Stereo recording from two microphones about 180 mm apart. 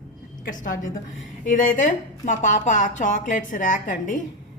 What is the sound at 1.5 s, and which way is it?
A woman's voice, 45° left (ahead or behind).